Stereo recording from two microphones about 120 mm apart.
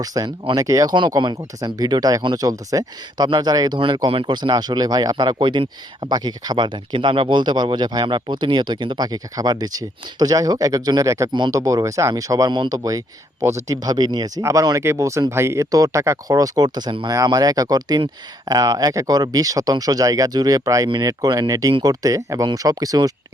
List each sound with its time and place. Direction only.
0.0 s speech: 30° right (ahead or behind)